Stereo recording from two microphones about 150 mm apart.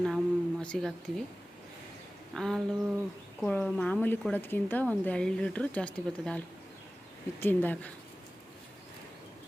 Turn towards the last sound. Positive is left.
turn(degrees=10)  # may be behind; listen again after turning